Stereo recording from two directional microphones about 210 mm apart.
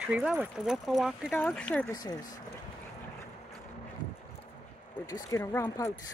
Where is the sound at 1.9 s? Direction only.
20° left (ahead or behind).